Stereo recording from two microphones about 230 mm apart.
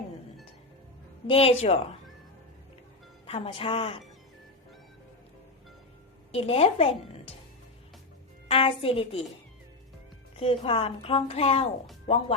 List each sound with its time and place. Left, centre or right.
1.3 s a woman's voice: left
3.2 s a woman's voice: left
6.3 s a woman's voice: left
8.4 s a woman's voice: left
10.3 s a woman's voice: left